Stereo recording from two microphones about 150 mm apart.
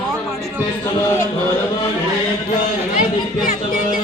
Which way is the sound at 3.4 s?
65° left (ahead or behind).